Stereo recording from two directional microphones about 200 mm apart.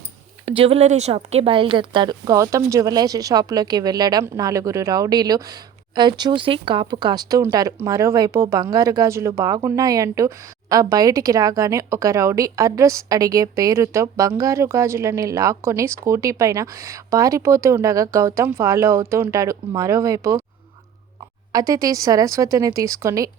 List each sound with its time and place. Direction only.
0.4 s speech: 30° right (ahead or behind)
21.5 s speech: 15° right (ahead or behind)